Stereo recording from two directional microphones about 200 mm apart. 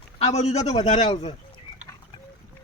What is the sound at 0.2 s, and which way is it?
Speech, 30° left (ahead or behind).